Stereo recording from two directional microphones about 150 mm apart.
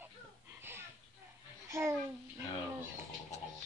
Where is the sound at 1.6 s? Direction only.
20° right (ahead or behind).